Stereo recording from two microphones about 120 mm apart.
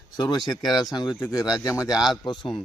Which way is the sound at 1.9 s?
5° right (ahead or behind).